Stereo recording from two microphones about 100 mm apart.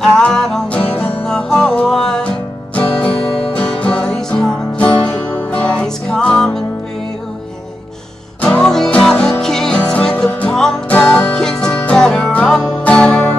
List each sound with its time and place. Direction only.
0.0 s music: 5° left (ahead or behind)
8.4 s music: 10° left (ahead or behind)